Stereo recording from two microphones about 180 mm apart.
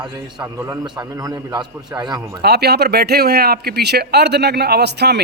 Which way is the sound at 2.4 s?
65° right (ahead or behind).